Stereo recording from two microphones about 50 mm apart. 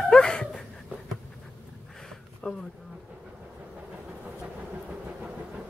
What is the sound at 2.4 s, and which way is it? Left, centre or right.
Speech, centre.